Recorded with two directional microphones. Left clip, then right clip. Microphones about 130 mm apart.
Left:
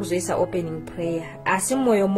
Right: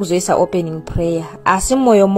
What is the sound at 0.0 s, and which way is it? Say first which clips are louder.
A woman's voice: right 8 dB; 45° right (ahead or behind).